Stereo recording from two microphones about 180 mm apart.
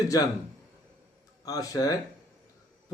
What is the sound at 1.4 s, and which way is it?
Speech, 20° left (ahead or behind).